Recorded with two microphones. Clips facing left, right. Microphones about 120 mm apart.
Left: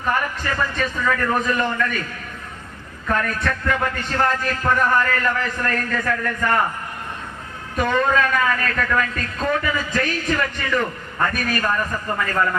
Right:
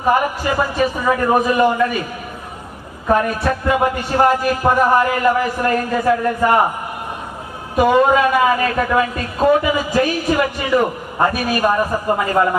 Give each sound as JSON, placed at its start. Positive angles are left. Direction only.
{"t": 0.1, "sound": "a woman's voice", "side_deg": -20}
{"t": 3.1, "sound": "a woman's voice", "side_deg": -20}
{"t": 7.8, "sound": "a woman's voice", "side_deg": -15}